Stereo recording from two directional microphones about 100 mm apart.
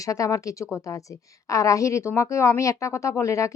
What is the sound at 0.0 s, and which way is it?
A woman's voice, 35° left (ahead or behind).